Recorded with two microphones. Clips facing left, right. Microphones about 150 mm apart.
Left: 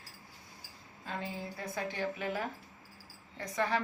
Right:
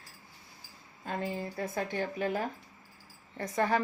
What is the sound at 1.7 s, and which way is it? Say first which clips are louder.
A woman's voice: right 2 dB; 45° right (ahead or behind).